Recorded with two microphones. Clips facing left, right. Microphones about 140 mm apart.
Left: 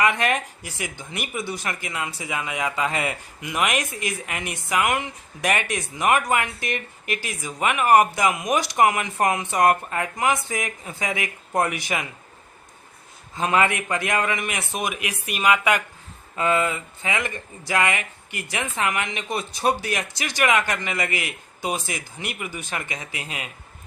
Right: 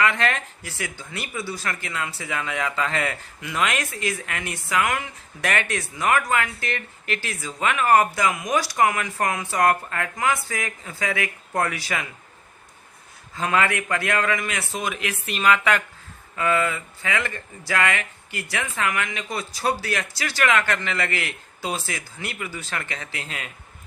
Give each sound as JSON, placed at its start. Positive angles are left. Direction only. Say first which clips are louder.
{"t": 0.0, "sound": "speech", "louder": "left 1 dB", "side_deg": 15}
{"t": 13.3, "sound": "a man's voice", "louder": "left 1 dB", "side_deg": 20}